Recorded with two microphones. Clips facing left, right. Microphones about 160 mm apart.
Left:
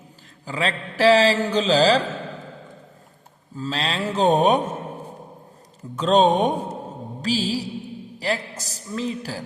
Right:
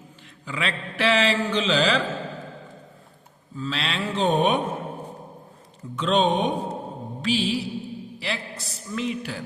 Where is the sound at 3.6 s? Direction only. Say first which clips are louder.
Left 3 dB; 40° left (ahead or behind).